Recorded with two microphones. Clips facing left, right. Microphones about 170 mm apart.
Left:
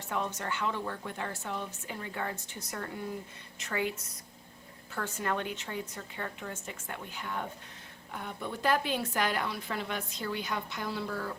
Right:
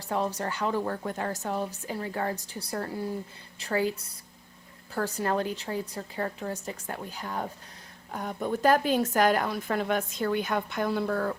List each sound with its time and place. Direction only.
0.1 s a woman's voice: 35° right (ahead or behind); by 11.3 s 55° right (ahead or behind)